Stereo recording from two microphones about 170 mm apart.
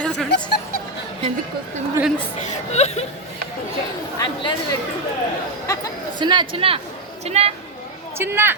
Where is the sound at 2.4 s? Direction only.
40° left (ahead or behind).